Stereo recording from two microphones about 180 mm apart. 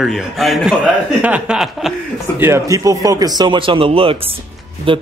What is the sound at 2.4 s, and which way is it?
Speech, 15° right (ahead or behind).